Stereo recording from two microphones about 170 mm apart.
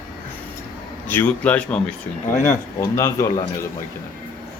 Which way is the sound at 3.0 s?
15° left (ahead or behind).